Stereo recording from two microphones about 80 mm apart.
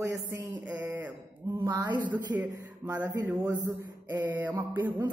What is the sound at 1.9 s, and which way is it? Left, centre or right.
Mantra, right.